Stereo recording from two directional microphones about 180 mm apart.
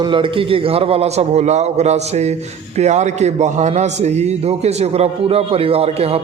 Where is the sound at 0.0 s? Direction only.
30° right (ahead or behind).